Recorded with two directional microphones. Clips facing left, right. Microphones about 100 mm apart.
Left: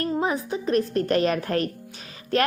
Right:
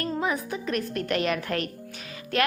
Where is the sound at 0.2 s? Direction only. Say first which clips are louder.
Left 3 dB; 30° left (ahead or behind).